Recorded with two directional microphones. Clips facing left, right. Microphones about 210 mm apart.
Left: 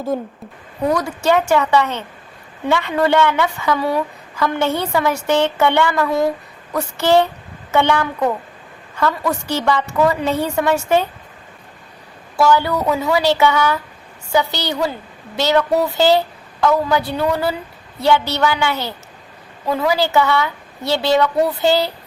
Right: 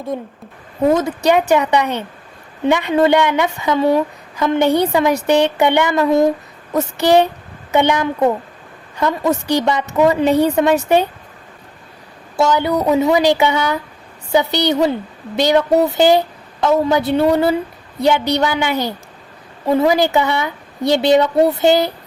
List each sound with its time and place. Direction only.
0.1 s a woman's voice: centre (ahead or behind)
0.9 s a woman's voice: 20° right (ahead or behind)
12.4 s a woman's voice: 20° right (ahead or behind)